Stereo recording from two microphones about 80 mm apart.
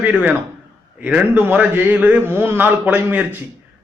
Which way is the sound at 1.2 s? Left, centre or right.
Right.